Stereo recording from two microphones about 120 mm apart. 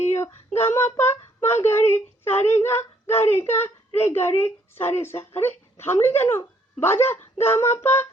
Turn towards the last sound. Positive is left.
turn(degrees=20)  # may be behind; listen again after turning